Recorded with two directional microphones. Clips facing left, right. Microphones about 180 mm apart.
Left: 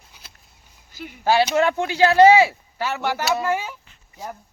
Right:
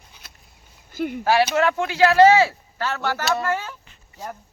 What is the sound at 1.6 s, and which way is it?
Speech, 25° left (ahead or behind).